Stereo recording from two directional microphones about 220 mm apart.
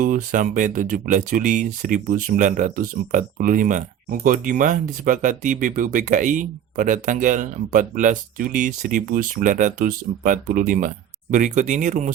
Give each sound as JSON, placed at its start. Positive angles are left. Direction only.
{"t": 0.0, "sound": "speech", "side_deg": -40}